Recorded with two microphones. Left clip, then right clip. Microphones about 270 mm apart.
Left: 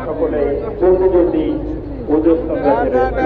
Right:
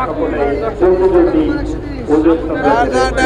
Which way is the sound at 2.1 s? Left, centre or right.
Right.